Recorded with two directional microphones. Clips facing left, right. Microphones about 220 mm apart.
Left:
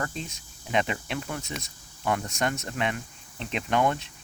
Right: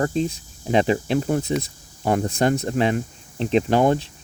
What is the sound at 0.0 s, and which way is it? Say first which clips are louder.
Speech: right 12 dB; 35° right (ahead or behind).